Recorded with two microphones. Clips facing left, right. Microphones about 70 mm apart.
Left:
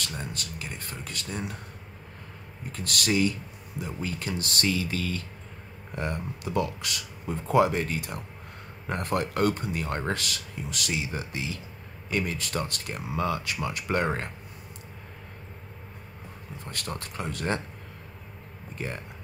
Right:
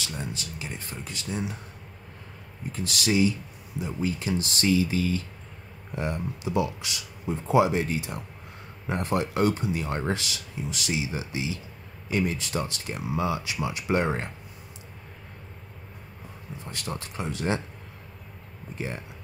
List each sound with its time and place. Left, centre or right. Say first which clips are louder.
0.0 s speech: right 1 dB; left
2.7 s speech: right 1 dB; left
16.7 s speech: right 1 dB; left
18.8 s speech: right 1 dB; left